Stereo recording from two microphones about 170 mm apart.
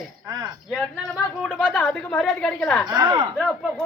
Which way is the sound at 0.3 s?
20° right (ahead or behind).